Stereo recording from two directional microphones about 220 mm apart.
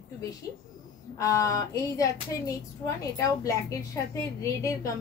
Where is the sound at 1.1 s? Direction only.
15° left (ahead or behind).